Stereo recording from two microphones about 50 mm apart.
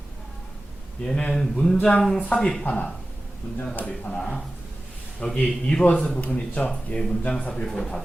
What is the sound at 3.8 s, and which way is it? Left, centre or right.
Speech, left.